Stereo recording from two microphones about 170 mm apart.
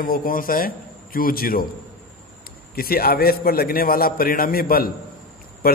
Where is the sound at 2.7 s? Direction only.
60° left (ahead or behind).